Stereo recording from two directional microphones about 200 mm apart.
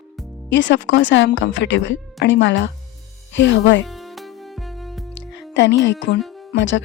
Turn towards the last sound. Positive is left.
turn(degrees=65)  # may be behind; listen again after turning